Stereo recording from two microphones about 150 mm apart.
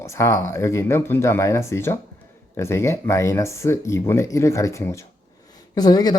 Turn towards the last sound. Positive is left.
turn(degrees=25)  # may be behind; listen again after turning